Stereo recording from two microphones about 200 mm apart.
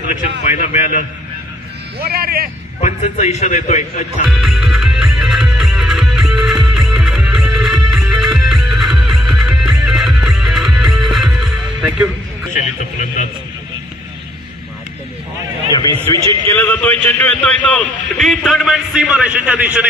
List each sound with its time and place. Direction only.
0.6 s a man's voice: 35° left (ahead or behind)
2.0 s speech: 50° right (ahead or behind)
2.8 s a man's voice: 35° left (ahead or behind)
4.3 s music: centre (ahead or behind)
12.5 s speech: 40° left (ahead or behind)
15.7 s a man's voice: 15° left (ahead or behind); by 19.9 s 5° right (ahead or behind)